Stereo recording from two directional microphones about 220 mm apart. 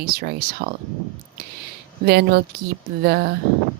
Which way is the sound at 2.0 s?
45° right (ahead or behind).